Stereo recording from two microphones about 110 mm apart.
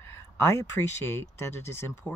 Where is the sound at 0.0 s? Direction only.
20° left (ahead or behind).